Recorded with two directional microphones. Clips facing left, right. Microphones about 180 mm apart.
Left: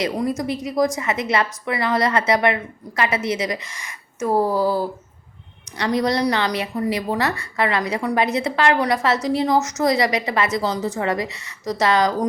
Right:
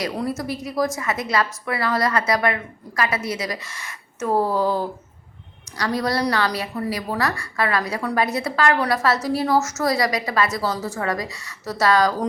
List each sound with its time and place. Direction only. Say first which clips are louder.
0.0 s a woman's voice: left 3 dB; 15° left (ahead or behind)
5.7 s a woman's voice: left 3 dB; 20° left (ahead or behind)